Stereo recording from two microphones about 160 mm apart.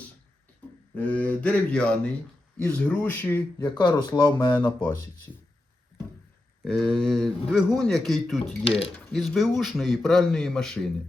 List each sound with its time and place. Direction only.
0.9 s speech: 10° left (ahead or behind)
3.8 s speech: 25° left (ahead or behind)
4.5 s speech: 10° left (ahead or behind)
6.7 s a man's voice: 5° left (ahead or behind)